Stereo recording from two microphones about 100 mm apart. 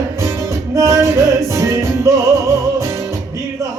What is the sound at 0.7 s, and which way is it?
Chant, 30° right (ahead or behind).